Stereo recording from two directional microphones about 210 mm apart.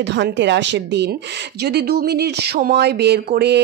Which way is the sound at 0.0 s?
55° right (ahead or behind).